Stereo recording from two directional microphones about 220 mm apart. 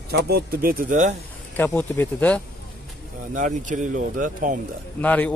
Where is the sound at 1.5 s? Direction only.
10° left (ahead or behind).